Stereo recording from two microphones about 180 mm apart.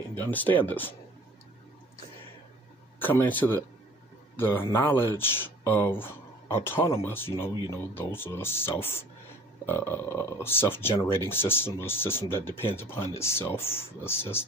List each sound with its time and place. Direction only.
0.1 s speech: 10° left (ahead or behind)
3.0 s speech: 10° left (ahead or behind)